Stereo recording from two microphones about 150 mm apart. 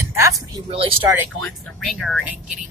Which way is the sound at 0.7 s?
40° right (ahead or behind).